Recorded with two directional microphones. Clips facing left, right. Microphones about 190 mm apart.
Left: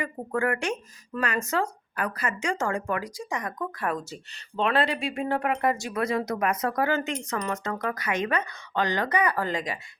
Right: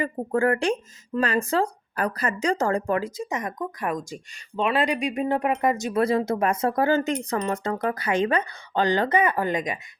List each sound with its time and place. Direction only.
0.0 s speech: 30° right (ahead or behind)
6.0 s speech: 30° right (ahead or behind)